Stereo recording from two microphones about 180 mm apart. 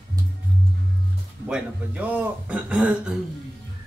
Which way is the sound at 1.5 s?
5° right (ahead or behind).